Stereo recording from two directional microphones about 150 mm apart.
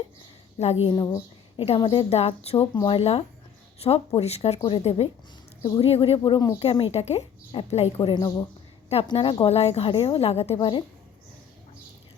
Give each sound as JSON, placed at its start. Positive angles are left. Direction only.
{"t": 0.6, "sound": "speech", "side_deg": 45}
{"t": 0.9, "sound": "a woman's voice", "side_deg": 25}
{"t": 1.5, "sound": "speech", "side_deg": 40}